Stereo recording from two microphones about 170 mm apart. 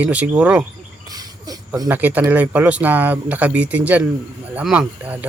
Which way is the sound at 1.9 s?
10° right (ahead or behind).